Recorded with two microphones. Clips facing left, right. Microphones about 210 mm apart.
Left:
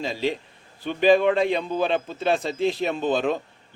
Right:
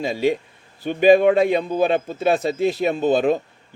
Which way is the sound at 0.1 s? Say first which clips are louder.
Right 7 dB; 50° right (ahead or behind).